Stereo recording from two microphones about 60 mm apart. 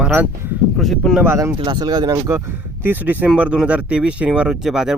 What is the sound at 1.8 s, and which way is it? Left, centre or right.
Speech, right.